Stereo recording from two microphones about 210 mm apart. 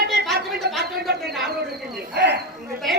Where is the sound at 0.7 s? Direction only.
50° right (ahead or behind).